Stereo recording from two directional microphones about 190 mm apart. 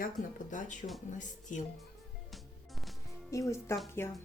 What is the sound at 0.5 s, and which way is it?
Speech, 40° left (ahead or behind).